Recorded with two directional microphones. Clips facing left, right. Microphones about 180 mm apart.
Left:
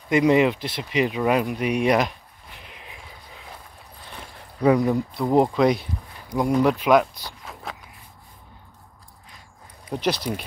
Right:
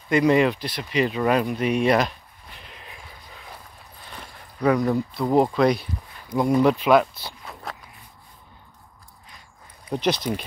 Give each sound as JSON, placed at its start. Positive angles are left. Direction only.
{"t": 0.1, "sound": "speech", "side_deg": 15}
{"t": 1.6, "sound": "a sound", "side_deg": 10}
{"t": 4.6, "sound": "speech", "side_deg": 15}
{"t": 4.9, "sound": "speech", "side_deg": 0}
{"t": 5.3, "sound": "speech", "side_deg": 15}
{"t": 9.8, "sound": "speech", "side_deg": 5}